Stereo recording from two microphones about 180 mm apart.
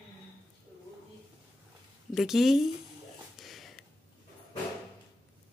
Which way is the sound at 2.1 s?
Centre (ahead or behind).